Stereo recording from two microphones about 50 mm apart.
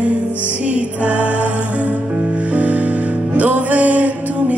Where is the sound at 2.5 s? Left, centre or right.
Right.